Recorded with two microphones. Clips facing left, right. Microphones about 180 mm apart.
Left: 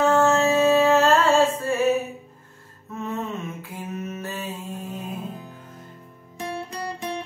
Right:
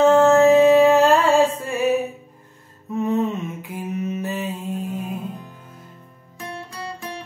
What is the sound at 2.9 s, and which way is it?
Mantra, 15° right (ahead or behind).